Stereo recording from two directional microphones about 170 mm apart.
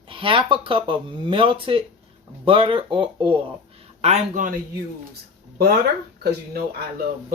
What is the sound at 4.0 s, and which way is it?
Speech, 45° right (ahead or behind).